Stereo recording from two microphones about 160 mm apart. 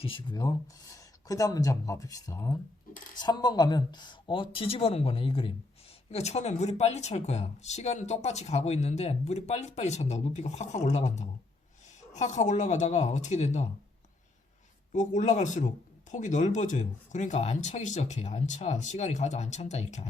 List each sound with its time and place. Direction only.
0.0 s speech: 30° left (ahead or behind)
14.9 s speech: 50° left (ahead or behind)